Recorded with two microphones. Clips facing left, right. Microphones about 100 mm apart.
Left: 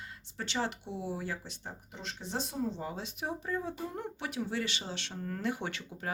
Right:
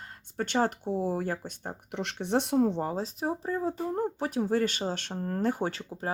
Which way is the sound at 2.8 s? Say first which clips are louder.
Right 7 dB; 40° right (ahead or behind).